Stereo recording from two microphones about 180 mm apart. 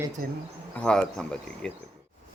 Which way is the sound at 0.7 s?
5° left (ahead or behind).